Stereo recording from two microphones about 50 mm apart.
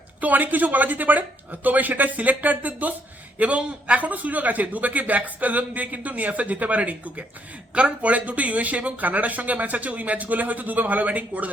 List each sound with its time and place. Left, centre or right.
0.2 s a man's voice: right